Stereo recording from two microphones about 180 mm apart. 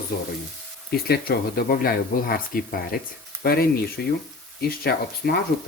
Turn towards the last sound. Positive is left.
turn(degrees=60)  # may be behind; listen again after turning